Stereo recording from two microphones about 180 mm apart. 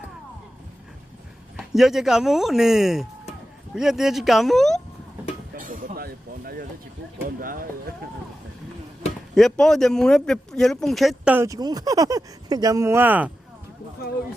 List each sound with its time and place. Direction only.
1.5 s a man's voice: centre (ahead or behind)
5.5 s a sound: 50° right (ahead or behind)
9.3 s a man's voice: centre (ahead or behind)
11.3 s speech: 20° right (ahead or behind)